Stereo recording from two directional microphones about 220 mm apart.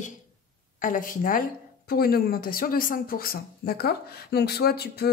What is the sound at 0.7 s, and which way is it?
Speech, 35° left (ahead or behind).